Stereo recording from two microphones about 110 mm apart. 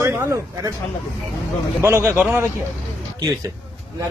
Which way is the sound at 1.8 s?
25° right (ahead or behind).